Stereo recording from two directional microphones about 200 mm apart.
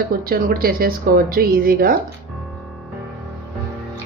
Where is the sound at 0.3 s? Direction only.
50° right (ahead or behind).